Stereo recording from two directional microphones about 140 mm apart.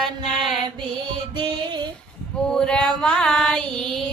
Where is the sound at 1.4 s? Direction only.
35° right (ahead or behind).